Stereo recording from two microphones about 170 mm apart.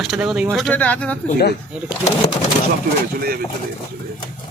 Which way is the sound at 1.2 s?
60° left (ahead or behind).